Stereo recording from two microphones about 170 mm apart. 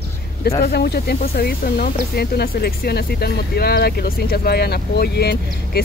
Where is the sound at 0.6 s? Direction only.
70° left (ahead or behind).